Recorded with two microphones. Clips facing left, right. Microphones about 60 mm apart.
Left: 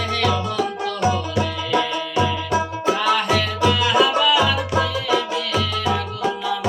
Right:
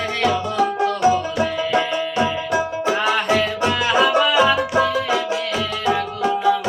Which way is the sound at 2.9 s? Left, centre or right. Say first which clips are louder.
Right 1 dB; right.